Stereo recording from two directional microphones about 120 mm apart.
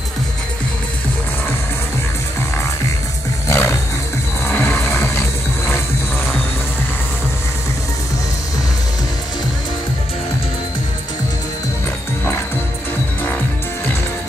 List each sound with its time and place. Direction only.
3.4 s roaring cats: 25° left (ahead or behind)
4.5 s music: 15° left (ahead or behind)